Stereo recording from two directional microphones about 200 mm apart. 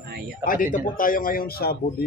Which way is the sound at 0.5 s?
40° left (ahead or behind).